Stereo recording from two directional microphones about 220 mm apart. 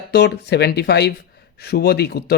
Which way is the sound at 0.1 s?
50° left (ahead or behind).